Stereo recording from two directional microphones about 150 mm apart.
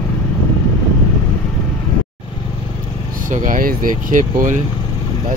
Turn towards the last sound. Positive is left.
turn(degrees=-60)  # may be behind; listen again after turning